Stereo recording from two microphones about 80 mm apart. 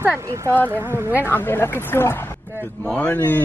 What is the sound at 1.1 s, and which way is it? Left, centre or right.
Speech, left.